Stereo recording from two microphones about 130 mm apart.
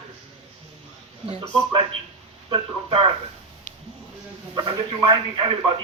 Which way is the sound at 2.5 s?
45° right (ahead or behind).